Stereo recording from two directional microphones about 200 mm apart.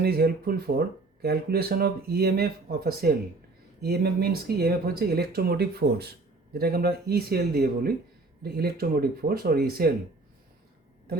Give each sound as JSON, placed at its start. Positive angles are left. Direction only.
{"t": 0.0, "sound": "speech", "side_deg": -50}